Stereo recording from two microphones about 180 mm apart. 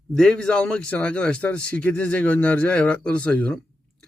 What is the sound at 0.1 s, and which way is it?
A man's voice, 5° left (ahead or behind).